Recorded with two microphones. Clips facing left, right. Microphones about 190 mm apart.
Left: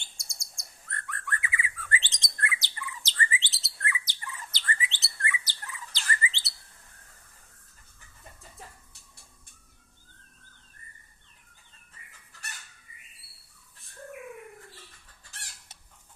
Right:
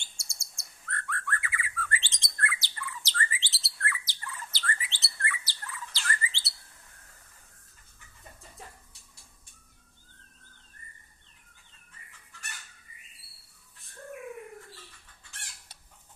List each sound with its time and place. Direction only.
0.2 s bird: 15° left (ahead or behind)